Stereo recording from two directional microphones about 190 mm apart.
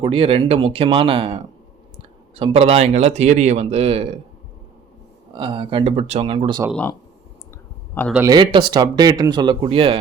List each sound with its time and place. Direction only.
0.0 s speech: 30° right (ahead or behind)
5.3 s speech: 25° right (ahead or behind)
8.0 s speech: 10° left (ahead or behind)
8.5 s speech: 25° right (ahead or behind)